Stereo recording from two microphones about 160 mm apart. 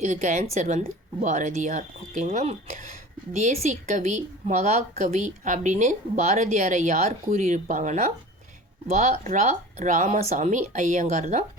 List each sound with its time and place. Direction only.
0.0 s a woman's voice: 50° right (ahead or behind)